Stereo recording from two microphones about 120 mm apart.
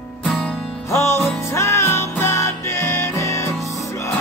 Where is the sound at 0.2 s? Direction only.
5° left (ahead or behind).